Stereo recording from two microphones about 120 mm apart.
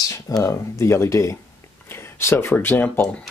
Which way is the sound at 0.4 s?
25° left (ahead or behind).